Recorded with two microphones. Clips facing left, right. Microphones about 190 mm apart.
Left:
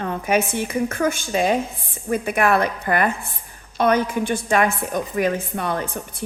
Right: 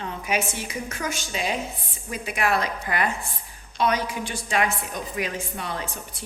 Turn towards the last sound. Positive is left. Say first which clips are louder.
# left 7 dB
turn(degrees=55)  # may be behind; listen again after turning